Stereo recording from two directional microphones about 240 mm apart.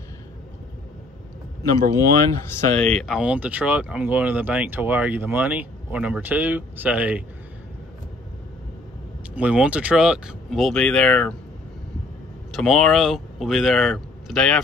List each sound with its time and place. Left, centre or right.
1.6 s speech: centre
9.3 s speech: centre
12.5 s speech: centre